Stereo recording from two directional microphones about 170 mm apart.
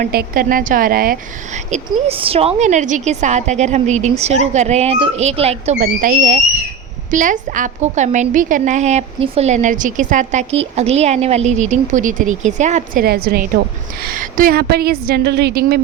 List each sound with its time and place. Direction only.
0.0 s a woman's voice: 60° right (ahead or behind); by 5.7 s 35° right (ahead or behind)
5.8 s a woman's voice: 50° right (ahead or behind); by 15.8 s 70° right (ahead or behind)